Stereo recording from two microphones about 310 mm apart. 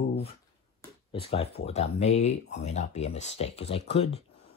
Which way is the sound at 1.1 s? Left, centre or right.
Centre.